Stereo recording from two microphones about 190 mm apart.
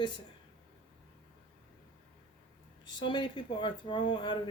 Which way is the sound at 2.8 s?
25° left (ahead or behind).